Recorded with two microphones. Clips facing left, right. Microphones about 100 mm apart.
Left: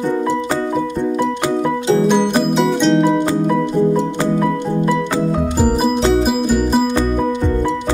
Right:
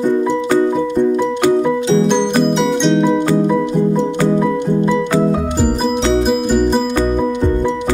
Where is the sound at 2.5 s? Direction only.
Centre (ahead or behind).